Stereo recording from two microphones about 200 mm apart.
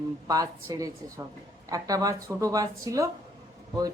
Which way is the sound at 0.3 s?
15° right (ahead or behind).